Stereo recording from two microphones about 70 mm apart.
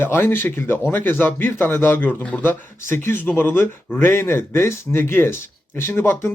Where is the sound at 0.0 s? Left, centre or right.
Left.